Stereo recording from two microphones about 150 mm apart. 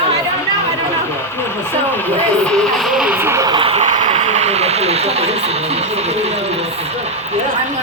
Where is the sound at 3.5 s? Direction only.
40° right (ahead or behind).